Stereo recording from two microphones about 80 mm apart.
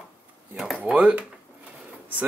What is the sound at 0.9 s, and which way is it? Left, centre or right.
Speech, centre.